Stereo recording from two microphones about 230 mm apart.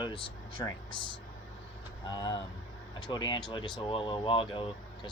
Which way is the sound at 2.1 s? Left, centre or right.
Centre.